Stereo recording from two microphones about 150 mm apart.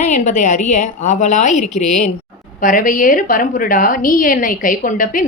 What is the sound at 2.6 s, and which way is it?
A woman's voice, 60° left (ahead or behind).